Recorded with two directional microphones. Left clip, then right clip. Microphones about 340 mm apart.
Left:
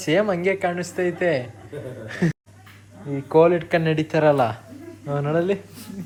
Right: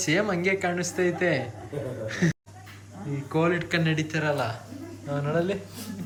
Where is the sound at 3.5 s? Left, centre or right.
Centre.